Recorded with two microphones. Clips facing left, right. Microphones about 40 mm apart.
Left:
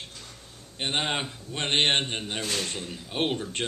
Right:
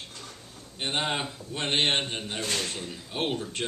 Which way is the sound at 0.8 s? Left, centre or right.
Centre.